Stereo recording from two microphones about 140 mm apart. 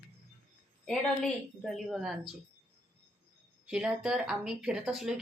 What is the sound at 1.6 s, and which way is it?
Speech, centre (ahead or behind).